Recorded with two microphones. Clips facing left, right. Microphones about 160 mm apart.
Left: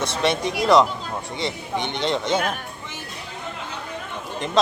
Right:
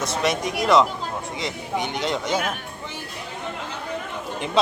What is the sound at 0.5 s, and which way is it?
Speech, centre (ahead or behind).